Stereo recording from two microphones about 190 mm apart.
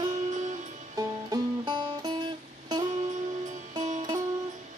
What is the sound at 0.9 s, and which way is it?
Music, 20° right (ahead or behind).